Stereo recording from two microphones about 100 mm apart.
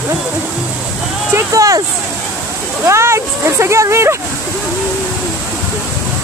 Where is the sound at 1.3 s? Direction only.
35° right (ahead or behind).